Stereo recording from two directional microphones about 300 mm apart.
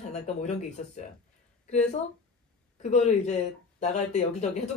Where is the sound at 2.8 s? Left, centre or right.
Left.